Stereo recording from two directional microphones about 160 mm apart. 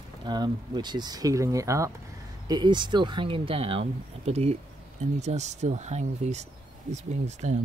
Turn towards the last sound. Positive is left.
turn(degrees=-45)  # may be behind; listen again after turning